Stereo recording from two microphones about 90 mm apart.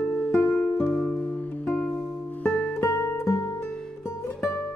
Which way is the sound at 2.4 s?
15° left (ahead or behind).